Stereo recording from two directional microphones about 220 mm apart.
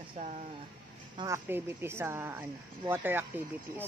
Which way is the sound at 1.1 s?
15° right (ahead or behind).